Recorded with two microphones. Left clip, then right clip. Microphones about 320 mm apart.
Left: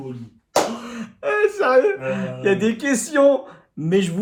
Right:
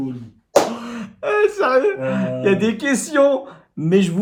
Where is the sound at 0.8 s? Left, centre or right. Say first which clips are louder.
Right 2 dB; centre.